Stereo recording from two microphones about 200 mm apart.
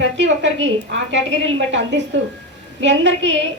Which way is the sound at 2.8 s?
65° right (ahead or behind).